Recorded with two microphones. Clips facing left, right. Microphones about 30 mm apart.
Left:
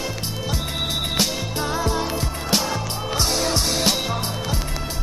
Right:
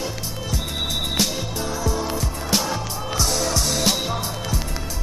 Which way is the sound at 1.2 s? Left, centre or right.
Centre.